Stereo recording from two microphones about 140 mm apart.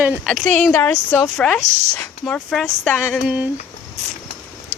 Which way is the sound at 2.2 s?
5° left (ahead or behind).